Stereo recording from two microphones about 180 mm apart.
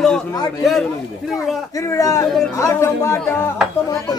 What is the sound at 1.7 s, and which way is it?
A man's voice, 15° left (ahead or behind).